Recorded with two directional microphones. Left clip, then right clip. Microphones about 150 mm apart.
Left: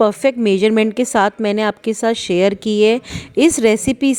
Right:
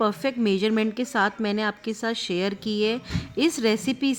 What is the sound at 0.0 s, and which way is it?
A woman's voice, 40° left (ahead or behind).